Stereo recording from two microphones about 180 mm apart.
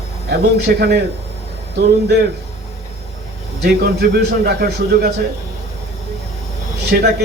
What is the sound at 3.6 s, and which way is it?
Speech, 65° right (ahead or behind).